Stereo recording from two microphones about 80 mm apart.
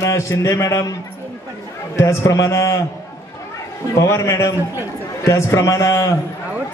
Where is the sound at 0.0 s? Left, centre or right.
Left.